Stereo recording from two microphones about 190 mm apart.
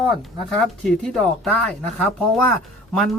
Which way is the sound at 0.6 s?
5° left (ahead or behind).